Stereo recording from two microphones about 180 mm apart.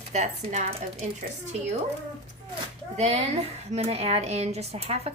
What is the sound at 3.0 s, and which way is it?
A woman's voice, 35° right (ahead or behind).